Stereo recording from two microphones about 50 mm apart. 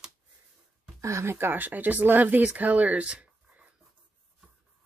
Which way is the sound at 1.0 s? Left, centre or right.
Right.